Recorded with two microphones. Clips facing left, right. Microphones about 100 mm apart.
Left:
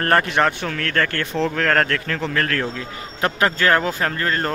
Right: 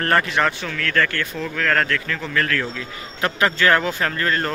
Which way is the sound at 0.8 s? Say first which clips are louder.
Right 2 dB; 30° left (ahead or behind).